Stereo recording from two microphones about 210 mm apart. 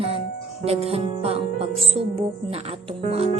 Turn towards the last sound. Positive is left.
turn(degrees=-30)  # may be behind; listen again after turning